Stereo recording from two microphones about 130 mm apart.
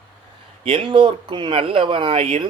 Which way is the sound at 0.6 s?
40° right (ahead or behind).